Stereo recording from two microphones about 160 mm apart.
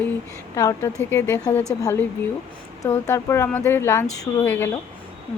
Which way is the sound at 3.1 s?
15° left (ahead or behind).